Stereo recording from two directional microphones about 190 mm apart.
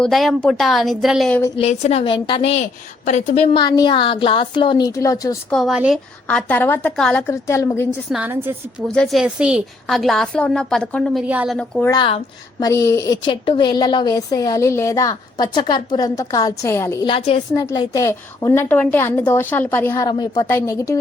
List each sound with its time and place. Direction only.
0.0 s a woman's voice: centre (ahead or behind)
1.5 s a woman's voice: 35° left (ahead or behind)
3.6 s a woman's voice: 20° left (ahead or behind)
5.5 s a woman's voice: centre (ahead or behind)
6.2 s a woman's voice: 10° left (ahead or behind)
8.1 s a woman's voice: 10° right (ahead or behind)
11.5 s a woman's voice: 5° left (ahead or behind)
11.9 s a woman's voice: 25° left (ahead or behind)
17.1 s a woman's voice: 25° left (ahead or behind)
17.5 s a woman's voice: 15° left (ahead or behind)